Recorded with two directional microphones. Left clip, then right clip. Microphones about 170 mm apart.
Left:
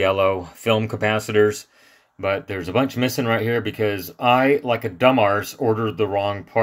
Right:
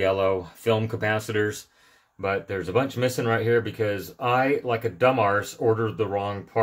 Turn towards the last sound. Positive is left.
turn(degrees=35)  # may be behind; listen again after turning